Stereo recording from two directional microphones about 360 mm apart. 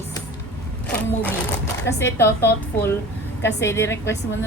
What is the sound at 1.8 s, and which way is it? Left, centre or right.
A woman's voice, centre.